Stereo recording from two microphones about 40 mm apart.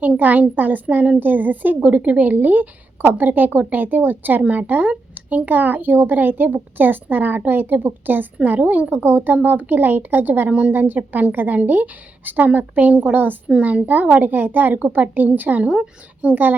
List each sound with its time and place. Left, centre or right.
0.2 s a woman's voice: right
4.4 s a woman's voice: right
8.9 s a woman's voice: right
12.9 s a woman's voice: right
15.7 s speech: right
16.3 s a woman's voice: right